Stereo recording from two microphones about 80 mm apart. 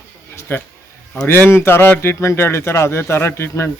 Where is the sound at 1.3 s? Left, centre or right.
Left.